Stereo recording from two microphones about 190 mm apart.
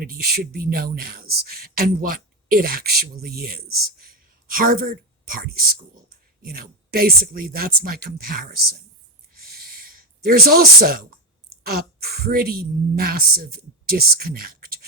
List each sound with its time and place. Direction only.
0.0 s speech: 50° right (ahead or behind)
9.5 s a sound: 50° right (ahead or behind)
11.6 s speech: 55° right (ahead or behind)